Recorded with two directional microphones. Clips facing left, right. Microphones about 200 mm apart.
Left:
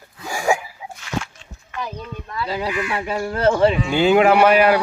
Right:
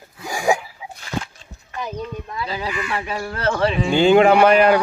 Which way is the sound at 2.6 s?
5° left (ahead or behind).